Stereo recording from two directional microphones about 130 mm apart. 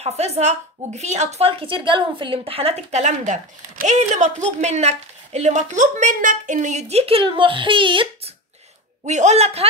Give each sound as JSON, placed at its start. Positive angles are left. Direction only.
{"t": 0.0, "sound": "speech", "side_deg": -55}
{"t": 9.0, "sound": "speech", "side_deg": -65}